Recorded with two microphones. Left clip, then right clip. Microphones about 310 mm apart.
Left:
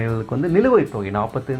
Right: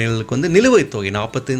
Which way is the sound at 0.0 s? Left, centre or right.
Right.